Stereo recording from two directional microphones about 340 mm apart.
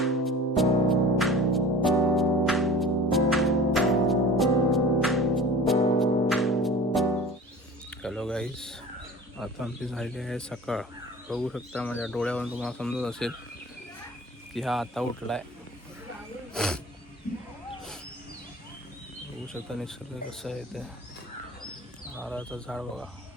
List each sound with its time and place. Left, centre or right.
0.0 s music: centre
7.9 s a sound: centre
9.4 s speech: centre
14.5 s speech: centre
16.6 s speech: centre
19.6 s speech: centre
22.2 s speech: centre